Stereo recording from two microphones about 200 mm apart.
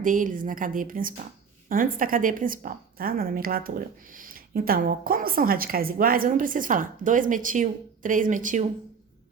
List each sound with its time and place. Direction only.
0.0 s a woman's voice: 40° right (ahead or behind)